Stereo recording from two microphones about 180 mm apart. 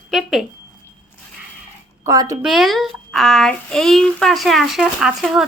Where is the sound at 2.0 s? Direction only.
20° right (ahead or behind).